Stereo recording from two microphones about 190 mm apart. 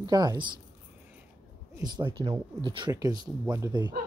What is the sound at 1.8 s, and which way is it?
Speech, 25° right (ahead or behind).